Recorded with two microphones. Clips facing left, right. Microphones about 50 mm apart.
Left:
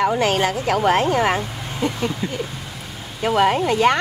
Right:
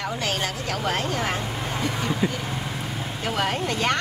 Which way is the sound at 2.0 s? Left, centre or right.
Centre.